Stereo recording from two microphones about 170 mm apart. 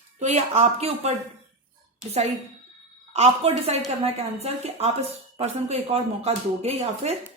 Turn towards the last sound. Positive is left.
turn(degrees=-40)  # may be behind; listen again after turning